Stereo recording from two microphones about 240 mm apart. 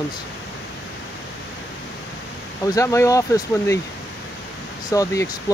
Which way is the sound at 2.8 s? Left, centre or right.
Centre.